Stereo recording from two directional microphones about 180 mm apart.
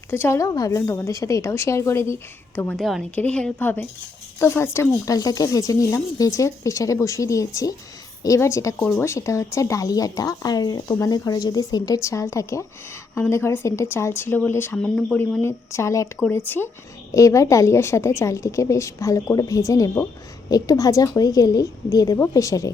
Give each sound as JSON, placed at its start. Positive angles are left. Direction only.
{"t": 0.1, "sound": "speech", "side_deg": 15}
{"t": 2.7, "sound": "a woman's voice", "side_deg": 0}